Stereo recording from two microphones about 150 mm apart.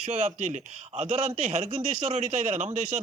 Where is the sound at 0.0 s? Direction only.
50° right (ahead or behind).